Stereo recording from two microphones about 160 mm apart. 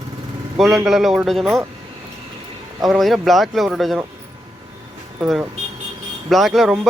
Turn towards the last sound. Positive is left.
turn(degrees=0)  # may be behind; listen again after turning